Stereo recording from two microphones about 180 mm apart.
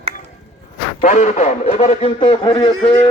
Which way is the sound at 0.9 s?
40° left (ahead or behind).